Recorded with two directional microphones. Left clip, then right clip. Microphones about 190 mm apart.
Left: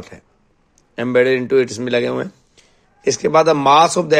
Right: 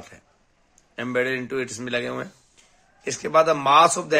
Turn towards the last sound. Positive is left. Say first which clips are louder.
# left 5 dB
turn(degrees=35)  # may be behind; listen again after turning